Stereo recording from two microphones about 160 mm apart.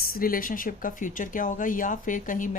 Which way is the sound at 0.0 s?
65° left (ahead or behind).